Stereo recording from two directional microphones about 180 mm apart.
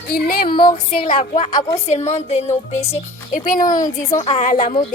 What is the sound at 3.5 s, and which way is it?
A woman's voice, 50° left (ahead or behind).